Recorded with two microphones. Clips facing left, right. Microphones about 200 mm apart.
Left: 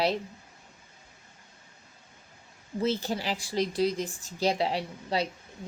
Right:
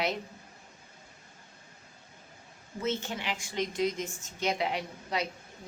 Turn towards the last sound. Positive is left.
turn(degrees=30)  # may be behind; listen again after turning